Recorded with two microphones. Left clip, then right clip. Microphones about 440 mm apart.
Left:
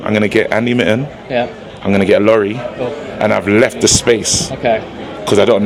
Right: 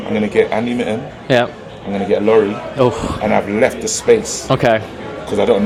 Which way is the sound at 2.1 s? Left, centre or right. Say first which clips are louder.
Left 1 dB; left.